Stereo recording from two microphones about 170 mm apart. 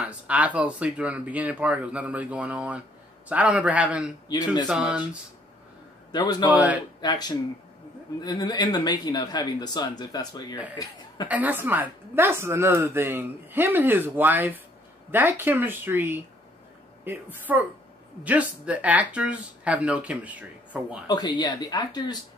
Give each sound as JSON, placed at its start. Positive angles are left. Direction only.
{"t": 0.0, "sound": "a woman's voice", "side_deg": -10}
{"t": 4.3, "sound": "speech", "side_deg": 25}
{"t": 4.6, "sound": "a woman's voice", "side_deg": -5}
{"t": 6.1, "sound": "speech", "side_deg": 25}
{"t": 6.5, "sound": "a woman's voice", "side_deg": -10}
{"t": 7.0, "sound": "speech", "side_deg": 25}
{"t": 11.2, "sound": "a woman's voice", "side_deg": -10}
{"t": 21.4, "sound": "speech", "side_deg": 25}